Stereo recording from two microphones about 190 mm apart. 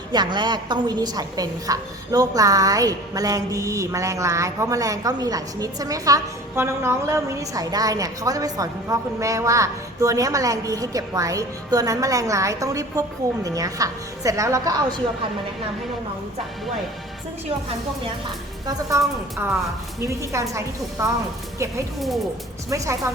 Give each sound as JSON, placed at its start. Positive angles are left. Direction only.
{"t": 0.1, "sound": "a woman's voice", "side_deg": -25}
{"t": 18.6, "sound": "a woman's voice", "side_deg": -20}